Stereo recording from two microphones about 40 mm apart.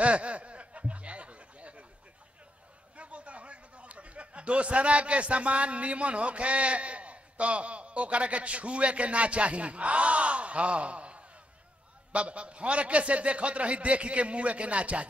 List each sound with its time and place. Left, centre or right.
0.0 s snicker: right
3.0 s a man's voice: right